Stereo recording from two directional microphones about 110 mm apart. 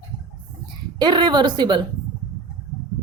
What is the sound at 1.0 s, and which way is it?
Speech, 45° right (ahead or behind).